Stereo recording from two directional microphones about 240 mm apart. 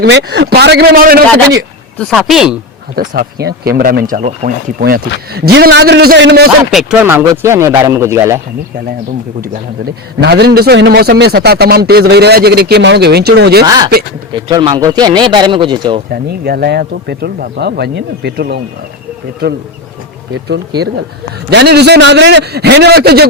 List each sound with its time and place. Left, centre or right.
0.0 s a man's voice: right
2.0 s speech: centre
2.9 s a man's voice: right
6.7 s speech: centre
9.4 s a man's voice: right
14.3 s speech: centre
16.4 s a man's voice: right